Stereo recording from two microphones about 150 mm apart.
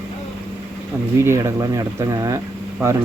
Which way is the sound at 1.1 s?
20° right (ahead or behind).